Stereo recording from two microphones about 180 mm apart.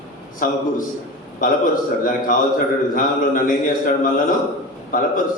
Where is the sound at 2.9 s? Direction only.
50° left (ahead or behind).